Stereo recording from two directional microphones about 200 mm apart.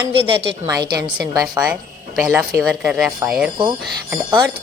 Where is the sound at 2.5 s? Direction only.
Centre (ahead or behind).